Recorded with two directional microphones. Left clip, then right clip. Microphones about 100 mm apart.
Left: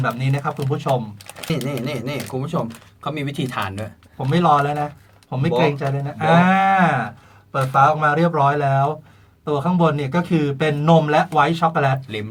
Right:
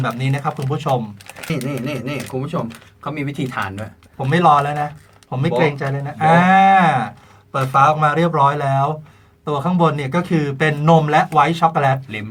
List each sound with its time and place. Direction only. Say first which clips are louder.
0.2 s speech: right 2 dB; 45° right (ahead or behind)
1.4 s speech: even; 35° left (ahead or behind)
4.3 s a man's voice: right 3 dB; 40° right (ahead or behind)
9.4 s a man's voice: right 2 dB; 40° right (ahead or behind)